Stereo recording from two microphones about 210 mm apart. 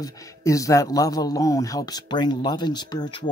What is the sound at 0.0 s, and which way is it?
Speech, 15° left (ahead or behind).